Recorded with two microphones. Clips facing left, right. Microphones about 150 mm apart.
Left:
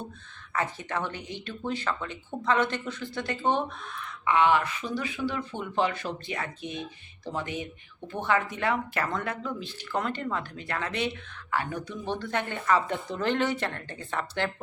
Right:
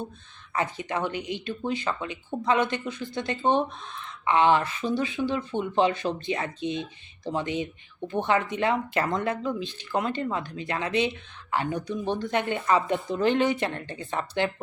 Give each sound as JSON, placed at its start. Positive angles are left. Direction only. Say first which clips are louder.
{"t": 0.5, "sound": "speech", "louder": "right 2 dB", "side_deg": -15}